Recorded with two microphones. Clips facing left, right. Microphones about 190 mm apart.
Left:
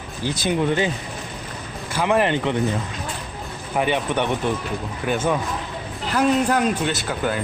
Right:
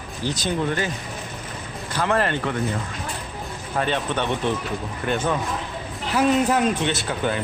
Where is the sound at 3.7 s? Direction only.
15° left (ahead or behind).